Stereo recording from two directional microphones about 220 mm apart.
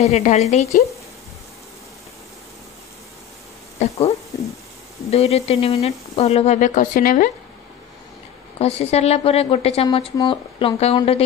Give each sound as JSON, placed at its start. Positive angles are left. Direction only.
{"t": 0.0, "sound": "speech", "side_deg": 30}
{"t": 3.8, "sound": "a woman's voice", "side_deg": 30}
{"t": 8.5, "sound": "a woman's voice", "side_deg": 30}